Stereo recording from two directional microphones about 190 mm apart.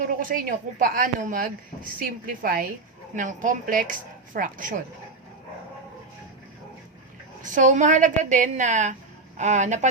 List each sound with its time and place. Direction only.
0.1 s a woman's voice: 45° right (ahead or behind)
7.4 s a woman's voice: 40° right (ahead or behind)